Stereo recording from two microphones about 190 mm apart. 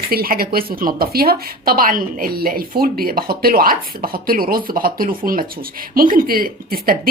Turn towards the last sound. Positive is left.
turn(degrees=-50)  # may be behind; listen again after turning